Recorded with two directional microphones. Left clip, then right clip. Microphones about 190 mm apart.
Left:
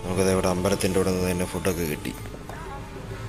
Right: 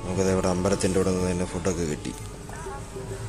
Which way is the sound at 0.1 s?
5° right (ahead or behind).